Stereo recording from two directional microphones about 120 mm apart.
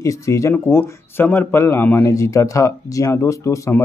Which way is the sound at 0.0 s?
25° left (ahead or behind).